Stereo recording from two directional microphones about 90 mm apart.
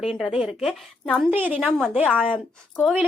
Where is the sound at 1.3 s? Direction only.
20° right (ahead or behind).